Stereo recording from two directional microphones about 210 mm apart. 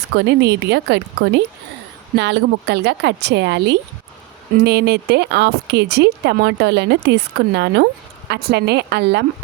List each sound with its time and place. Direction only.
0.2 s speech: 55° right (ahead or behind)